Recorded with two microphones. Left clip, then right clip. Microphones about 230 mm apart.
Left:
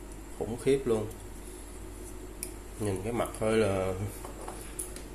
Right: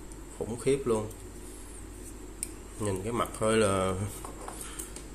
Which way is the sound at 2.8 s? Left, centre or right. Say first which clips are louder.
Right 1 dB; centre.